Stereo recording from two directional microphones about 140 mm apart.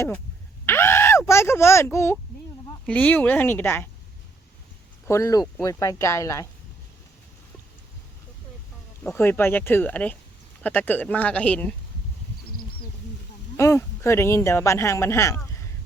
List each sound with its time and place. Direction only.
0.6 s groan: 15° left (ahead or behind)
1.3 s speech: 20° left (ahead or behind)
5.0 s speech: 20° left (ahead or behind)
9.0 s speech: 15° left (ahead or behind)
13.6 s speech: 20° left (ahead or behind)